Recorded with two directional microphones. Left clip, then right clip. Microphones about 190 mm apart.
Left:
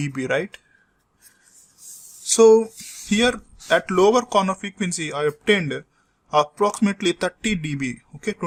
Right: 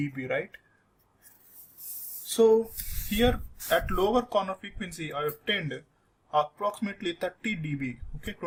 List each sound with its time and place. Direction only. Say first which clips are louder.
0.0 s speech: left 7 dB; 45° left (ahead or behind)
2.2 s speech: left 8 dB; 40° left (ahead or behind)